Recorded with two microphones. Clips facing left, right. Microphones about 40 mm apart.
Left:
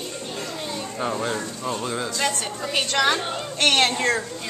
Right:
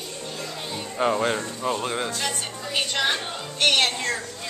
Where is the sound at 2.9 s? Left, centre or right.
Left.